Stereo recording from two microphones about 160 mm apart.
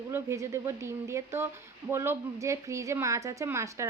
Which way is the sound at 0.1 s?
20° right (ahead or behind).